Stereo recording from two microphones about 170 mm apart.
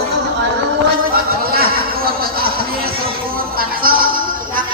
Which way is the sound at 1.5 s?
60° right (ahead or behind).